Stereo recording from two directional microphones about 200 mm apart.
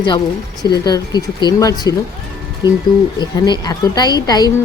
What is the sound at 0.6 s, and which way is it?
A woman's voice, 20° left (ahead or behind).